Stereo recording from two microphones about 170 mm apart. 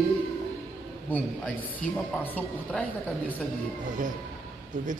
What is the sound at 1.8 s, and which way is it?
A woman's voice, 10° left (ahead or behind).